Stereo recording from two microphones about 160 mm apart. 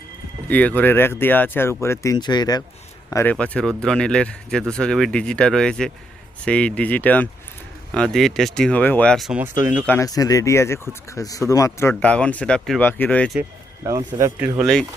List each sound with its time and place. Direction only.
0.4 s speech: 10° left (ahead or behind)
3.3 s speech: 5° left (ahead or behind)
9.4 s speech: 15° right (ahead or behind)
9.8 s speech: 10° left (ahead or behind)
10.1 s speech: 20° left (ahead or behind)
13.8 s speech: 20° right (ahead or behind)
14.6 s speech: centre (ahead or behind)